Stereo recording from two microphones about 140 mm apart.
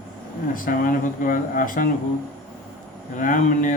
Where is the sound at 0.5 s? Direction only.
90° left.